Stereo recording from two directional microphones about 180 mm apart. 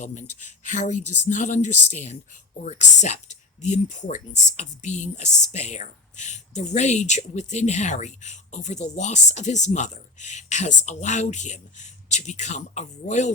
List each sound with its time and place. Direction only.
0.0 s speech: 40° left (ahead or behind)